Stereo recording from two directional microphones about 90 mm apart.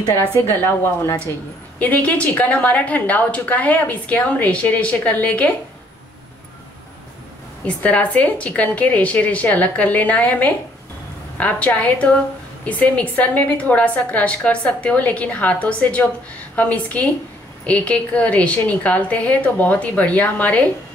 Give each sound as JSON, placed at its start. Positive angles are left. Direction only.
{"t": 0.5, "sound": "speech", "side_deg": 25}
{"t": 1.8, "sound": "a woman's voice", "side_deg": 15}
{"t": 7.6, "sound": "a woman's voice", "side_deg": 15}